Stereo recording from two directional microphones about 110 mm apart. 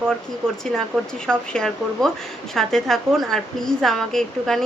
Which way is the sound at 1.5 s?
5° left (ahead or behind).